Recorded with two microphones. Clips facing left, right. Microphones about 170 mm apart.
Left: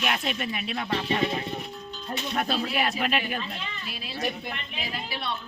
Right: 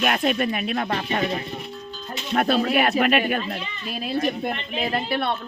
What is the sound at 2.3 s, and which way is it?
Speech, 60° right (ahead or behind).